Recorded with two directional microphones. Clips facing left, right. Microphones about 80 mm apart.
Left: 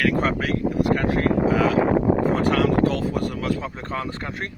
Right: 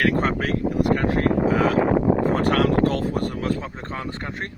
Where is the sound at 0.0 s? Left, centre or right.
Right.